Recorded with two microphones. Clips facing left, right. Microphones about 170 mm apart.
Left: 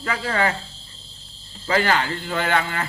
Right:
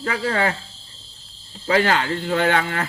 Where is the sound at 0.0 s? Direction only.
40° right (ahead or behind).